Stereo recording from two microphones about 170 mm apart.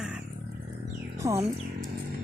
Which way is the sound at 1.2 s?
20° right (ahead or behind).